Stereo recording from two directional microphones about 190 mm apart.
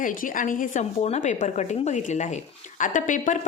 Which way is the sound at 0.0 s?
45° left (ahead or behind).